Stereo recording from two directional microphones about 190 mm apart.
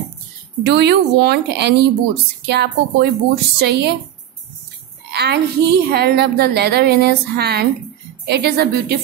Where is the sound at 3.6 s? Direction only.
60° right (ahead or behind).